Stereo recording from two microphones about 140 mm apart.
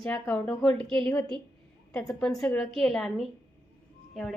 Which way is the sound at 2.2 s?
5° left (ahead or behind).